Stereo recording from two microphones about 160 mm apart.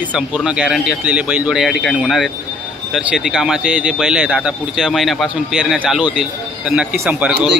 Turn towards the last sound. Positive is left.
turn(degrees=-10)  # may be behind; listen again after turning